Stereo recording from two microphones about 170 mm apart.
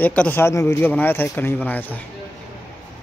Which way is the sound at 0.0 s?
10° left (ahead or behind).